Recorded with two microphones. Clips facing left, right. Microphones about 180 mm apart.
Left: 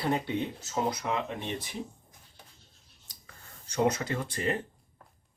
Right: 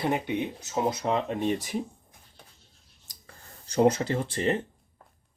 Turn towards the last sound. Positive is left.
turn(degrees=-30)  # may be behind; listen again after turning